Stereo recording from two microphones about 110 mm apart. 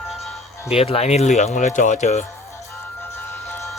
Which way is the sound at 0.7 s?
65° left (ahead or behind).